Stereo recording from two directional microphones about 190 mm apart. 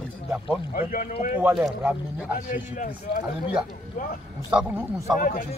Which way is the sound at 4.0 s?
45° left (ahead or behind).